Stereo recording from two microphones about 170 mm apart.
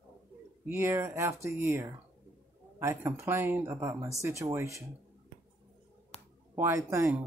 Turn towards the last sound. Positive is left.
turn(degrees=-15)  # may be behind; listen again after turning